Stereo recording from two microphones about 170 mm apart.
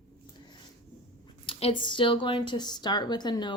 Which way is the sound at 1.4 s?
35° left (ahead or behind).